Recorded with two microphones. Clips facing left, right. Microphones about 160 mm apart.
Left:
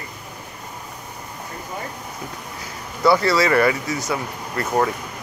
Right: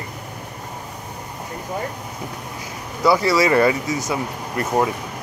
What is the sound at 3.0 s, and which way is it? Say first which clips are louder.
Speech: even; 15° right (ahead or behind).